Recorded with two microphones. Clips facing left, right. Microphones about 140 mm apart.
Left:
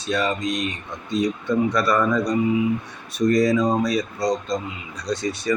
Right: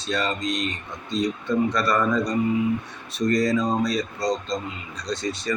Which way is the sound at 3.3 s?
5° left (ahead or behind).